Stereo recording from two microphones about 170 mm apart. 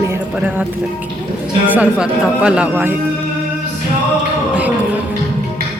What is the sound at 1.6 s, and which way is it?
Speech, 10° right (ahead or behind).